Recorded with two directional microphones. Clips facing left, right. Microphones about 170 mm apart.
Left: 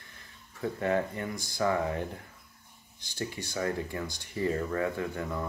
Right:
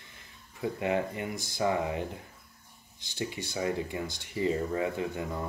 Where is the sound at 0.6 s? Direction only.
15° right (ahead or behind).